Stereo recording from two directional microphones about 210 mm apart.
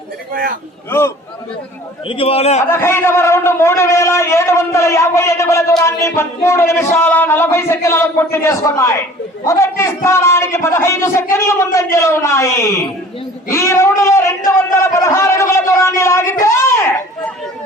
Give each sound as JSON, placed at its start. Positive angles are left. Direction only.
{"t": 0.9, "sound": "a man's voice", "side_deg": 10}
{"t": 2.0, "sound": "a man's voice", "side_deg": 25}
{"t": 2.6, "sound": "a man's voice", "side_deg": 10}
{"t": 16.4, "sound": "a sound", "side_deg": 10}